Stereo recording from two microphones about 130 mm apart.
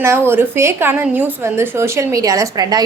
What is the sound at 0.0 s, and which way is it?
A woman's voice, 20° right (ahead or behind).